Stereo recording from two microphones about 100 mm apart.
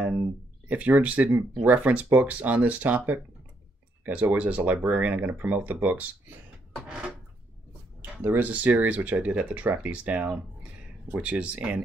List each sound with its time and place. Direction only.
0.0 s speech: 15° right (ahead or behind)